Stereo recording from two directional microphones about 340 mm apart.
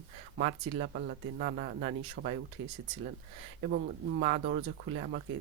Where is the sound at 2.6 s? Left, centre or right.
Right.